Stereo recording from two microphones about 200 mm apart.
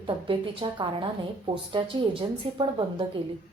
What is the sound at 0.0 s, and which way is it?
A woman's voice, 25° right (ahead or behind).